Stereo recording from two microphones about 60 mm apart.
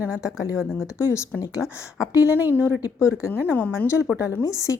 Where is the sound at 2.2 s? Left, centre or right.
Right.